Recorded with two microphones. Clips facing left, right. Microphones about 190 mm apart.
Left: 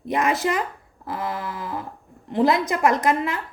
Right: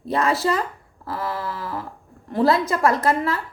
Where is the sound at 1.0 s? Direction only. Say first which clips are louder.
Right 1 dB; 20° left (ahead or behind).